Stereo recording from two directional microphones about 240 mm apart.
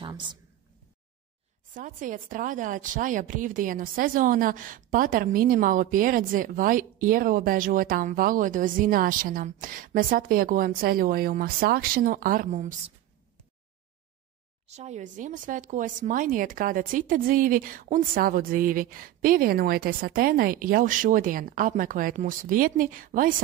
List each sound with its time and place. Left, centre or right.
0.0 s a sound: centre
1.7 s a woman's voice: right
14.7 s a woman's voice: right